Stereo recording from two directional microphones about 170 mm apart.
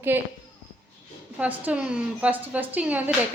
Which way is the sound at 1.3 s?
10° right (ahead or behind).